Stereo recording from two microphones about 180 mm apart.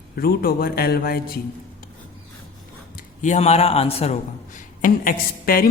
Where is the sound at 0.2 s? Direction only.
55° left (ahead or behind).